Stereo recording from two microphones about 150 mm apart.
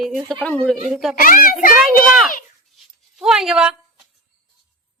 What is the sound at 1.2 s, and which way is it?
Speech, 70° left (ahead or behind).